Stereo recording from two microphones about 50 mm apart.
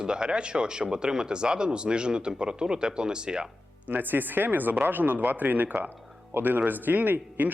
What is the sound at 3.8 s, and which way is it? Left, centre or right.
Speech, right.